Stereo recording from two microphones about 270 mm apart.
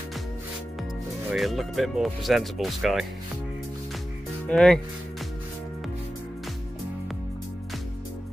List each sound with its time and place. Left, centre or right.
1.3 s speech: centre
4.5 s speech: centre